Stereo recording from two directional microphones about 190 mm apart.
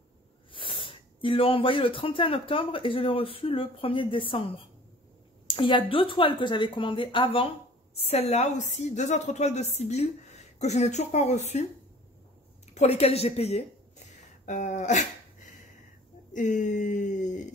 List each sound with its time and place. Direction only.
0.5 s speech: 25° left (ahead or behind)
5.5 s a woman's voice: 25° left (ahead or behind)
12.7 s a woman's voice: 35° left (ahead or behind)
16.3 s a woman's voice: 40° left (ahead or behind)